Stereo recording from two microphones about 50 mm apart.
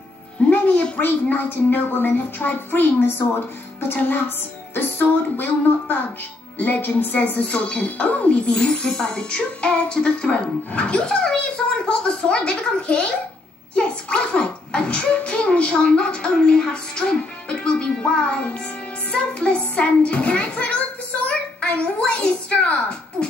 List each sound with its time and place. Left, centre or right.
0.4 s music: left
0.9 s a woman's voice: left
4.7 s music: left
6.6 s a woman's voice: left